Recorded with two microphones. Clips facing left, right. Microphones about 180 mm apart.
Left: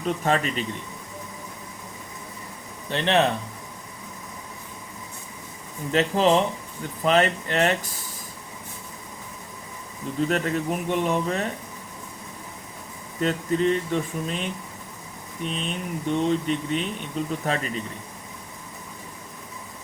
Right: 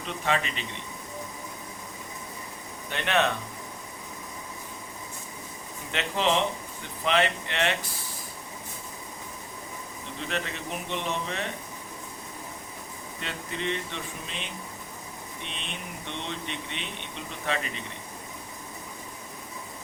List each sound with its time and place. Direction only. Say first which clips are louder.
0.0 s speech: left 5 dB; 45° left (ahead or behind)
2.9 s speech: left 5 dB; 30° left (ahead or behind)
5.9 s speech: left 7 dB; 40° left (ahead or behind)
10.2 s speech: left 10 dB; 45° left (ahead or behind)
13.1 s speech: left 13 dB; 40° left (ahead or behind)
16.0 s speech: left 14 dB; 40° left (ahead or behind)